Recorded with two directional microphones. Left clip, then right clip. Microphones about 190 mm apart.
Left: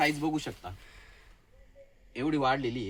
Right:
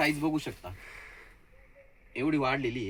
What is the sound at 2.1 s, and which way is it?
Speech, 5° left (ahead or behind).